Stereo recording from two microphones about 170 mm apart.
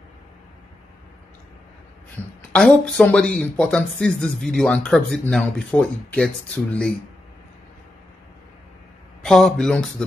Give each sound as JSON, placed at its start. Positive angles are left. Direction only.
{"t": 2.2, "sound": "a woman's voice", "side_deg": 10}
{"t": 9.2, "sound": "speech", "side_deg": 0}